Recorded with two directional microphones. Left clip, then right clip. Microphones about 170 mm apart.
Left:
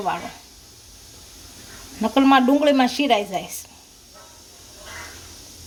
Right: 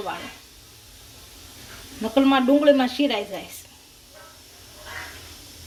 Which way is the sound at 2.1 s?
50° left (ahead or behind).